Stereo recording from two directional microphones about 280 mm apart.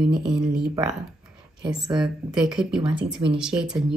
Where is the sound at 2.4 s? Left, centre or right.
Centre.